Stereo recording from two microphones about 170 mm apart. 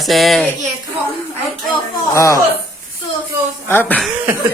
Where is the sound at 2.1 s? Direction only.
20° left (ahead or behind).